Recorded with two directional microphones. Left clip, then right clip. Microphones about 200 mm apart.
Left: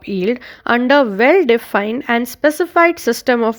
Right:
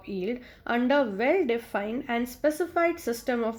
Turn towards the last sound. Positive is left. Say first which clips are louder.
# left 13 dB
turn(degrees=45)  # may be behind; listen again after turning